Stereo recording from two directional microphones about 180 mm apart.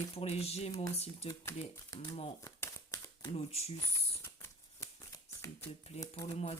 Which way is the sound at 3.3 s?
35° left (ahead or behind).